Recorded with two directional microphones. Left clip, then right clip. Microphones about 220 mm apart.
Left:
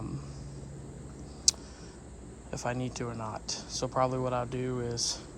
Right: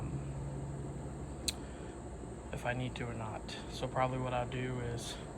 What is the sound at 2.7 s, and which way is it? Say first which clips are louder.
Speech: left 4 dB; 20° left (ahead or behind).